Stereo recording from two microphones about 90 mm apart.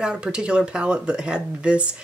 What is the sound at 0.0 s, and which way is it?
Speech, 10° right (ahead or behind).